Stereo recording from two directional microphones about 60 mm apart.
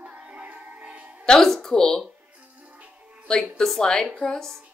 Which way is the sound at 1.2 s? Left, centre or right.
Centre.